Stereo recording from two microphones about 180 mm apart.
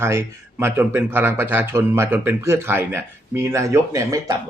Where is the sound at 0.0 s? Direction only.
15° right (ahead or behind).